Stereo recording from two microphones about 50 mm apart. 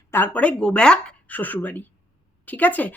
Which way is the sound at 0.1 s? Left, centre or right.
Left.